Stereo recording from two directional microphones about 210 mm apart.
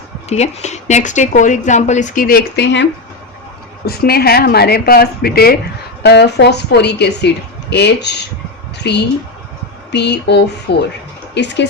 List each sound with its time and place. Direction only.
0.3 s speech: 30° left (ahead or behind); by 2.8 s 55° left (ahead or behind)
3.8 s speech: 50° left (ahead or behind)